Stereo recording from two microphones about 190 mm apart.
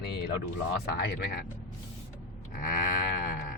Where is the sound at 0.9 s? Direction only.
55° left (ahead or behind).